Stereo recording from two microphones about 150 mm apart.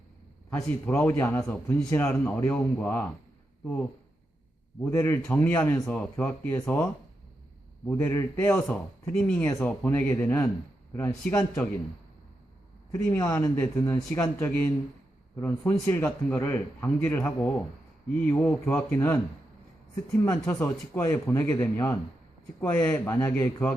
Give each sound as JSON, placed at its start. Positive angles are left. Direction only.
{"t": 0.5, "sound": "a man's voice", "side_deg": 10}
{"t": 4.8, "sound": "a man's voice", "side_deg": 15}
{"t": 7.9, "sound": "a man's voice", "side_deg": 15}
{"t": 8.6, "sound": "a man's voice", "side_deg": 5}
{"t": 12.9, "sound": "a man's voice", "side_deg": 25}
{"t": 20.6, "sound": "a man's voice", "side_deg": 15}